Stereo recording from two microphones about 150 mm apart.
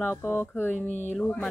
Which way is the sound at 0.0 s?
15° left (ahead or behind).